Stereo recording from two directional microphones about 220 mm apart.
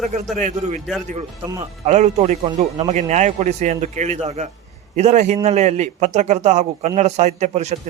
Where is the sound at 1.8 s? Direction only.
30° right (ahead or behind).